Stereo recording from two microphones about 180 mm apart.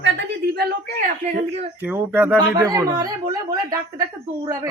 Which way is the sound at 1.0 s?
50° right (ahead or behind).